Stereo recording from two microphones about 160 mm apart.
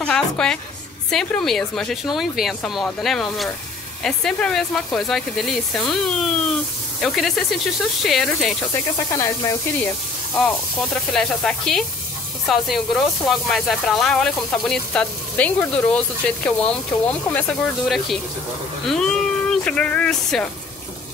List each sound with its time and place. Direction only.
0.0 s speech: 5° left (ahead or behind)
8.7 s speech: 20° left (ahead or behind)
10.3 s speech: 5° left (ahead or behind)